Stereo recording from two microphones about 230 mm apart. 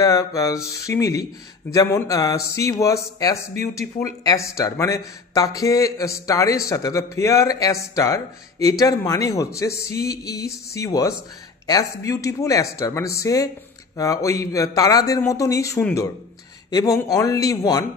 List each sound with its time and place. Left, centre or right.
0.0 s speech: centre